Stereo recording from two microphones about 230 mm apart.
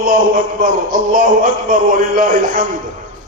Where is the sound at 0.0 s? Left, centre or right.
Right.